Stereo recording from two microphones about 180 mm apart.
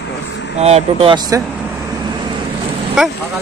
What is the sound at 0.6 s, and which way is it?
Speech, 35° right (ahead or behind).